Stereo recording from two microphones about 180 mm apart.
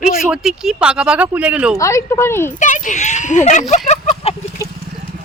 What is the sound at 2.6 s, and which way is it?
Speech, 45° left (ahead or behind).